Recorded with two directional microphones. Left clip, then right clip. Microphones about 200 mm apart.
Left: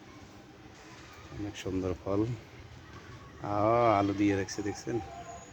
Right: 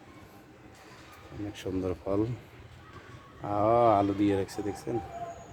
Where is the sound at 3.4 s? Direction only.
10° left (ahead or behind).